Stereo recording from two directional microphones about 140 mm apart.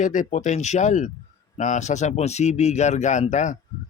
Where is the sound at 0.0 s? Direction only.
65° left (ahead or behind).